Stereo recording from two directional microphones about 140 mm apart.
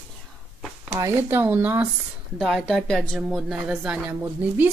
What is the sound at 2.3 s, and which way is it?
Speech, centre (ahead or behind).